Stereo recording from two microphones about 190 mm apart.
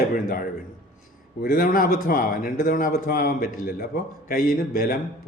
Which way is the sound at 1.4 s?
50° left (ahead or behind).